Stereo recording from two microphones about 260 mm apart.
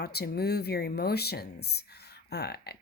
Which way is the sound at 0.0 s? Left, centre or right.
Left.